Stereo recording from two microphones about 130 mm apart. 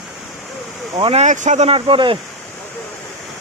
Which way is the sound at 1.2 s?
70° right (ahead or behind).